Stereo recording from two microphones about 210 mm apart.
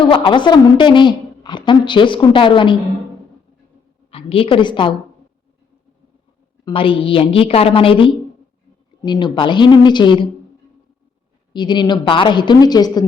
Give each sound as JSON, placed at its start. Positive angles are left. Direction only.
{"t": 0.0, "sound": "a woman's voice", "side_deg": 25}
{"t": 4.1, "sound": "a woman's voice", "side_deg": 25}
{"t": 6.7, "sound": "a woman's voice", "side_deg": 25}
{"t": 11.5, "sound": "a woman's voice", "side_deg": 20}